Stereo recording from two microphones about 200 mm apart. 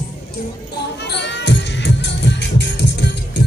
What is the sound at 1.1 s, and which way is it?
Music, 60° left (ahead or behind).